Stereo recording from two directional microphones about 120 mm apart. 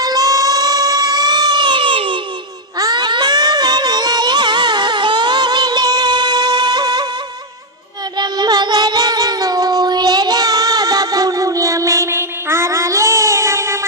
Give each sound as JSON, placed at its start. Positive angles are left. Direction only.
{"t": 0.0, "sound": "a sound", "side_deg": -30}
{"t": 2.7, "sound": "music", "side_deg": -35}
{"t": 8.2, "sound": "child singing", "side_deg": -35}